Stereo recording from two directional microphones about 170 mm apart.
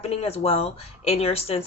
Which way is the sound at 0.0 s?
35° left (ahead or behind).